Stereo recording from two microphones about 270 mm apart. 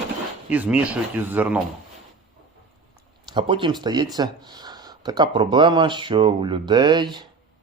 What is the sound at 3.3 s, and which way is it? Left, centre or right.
Speech, centre.